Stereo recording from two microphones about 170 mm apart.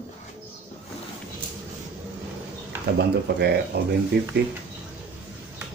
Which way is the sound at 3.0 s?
70° right (ahead or behind).